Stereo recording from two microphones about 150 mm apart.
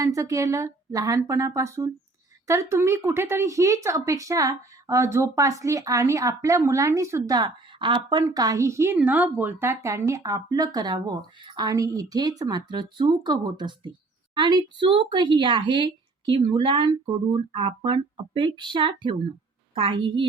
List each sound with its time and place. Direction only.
0.0 s speech: 20° right (ahead or behind)